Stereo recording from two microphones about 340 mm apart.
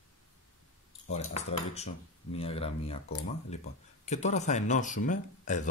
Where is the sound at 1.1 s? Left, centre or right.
Centre.